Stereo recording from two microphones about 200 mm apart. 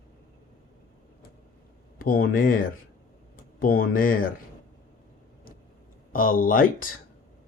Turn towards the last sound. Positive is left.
turn(degrees=45)  # may be behind; listen again after turning